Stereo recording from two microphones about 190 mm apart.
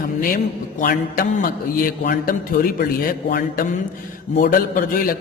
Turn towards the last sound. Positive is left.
turn(degrees=50)  # may be behind; listen again after turning